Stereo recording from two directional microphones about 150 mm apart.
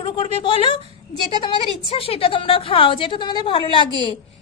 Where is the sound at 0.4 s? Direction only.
35° left (ahead or behind).